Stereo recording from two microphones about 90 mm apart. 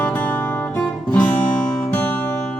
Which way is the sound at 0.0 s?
15° left (ahead or behind).